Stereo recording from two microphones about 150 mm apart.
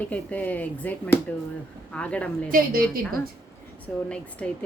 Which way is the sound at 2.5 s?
70° right (ahead or behind).